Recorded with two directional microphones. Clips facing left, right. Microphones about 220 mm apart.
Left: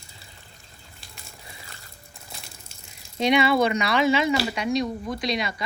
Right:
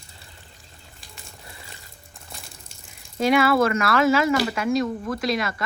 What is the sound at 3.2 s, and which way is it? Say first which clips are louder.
Speech: right 1 dB; 5° right (ahead or behind).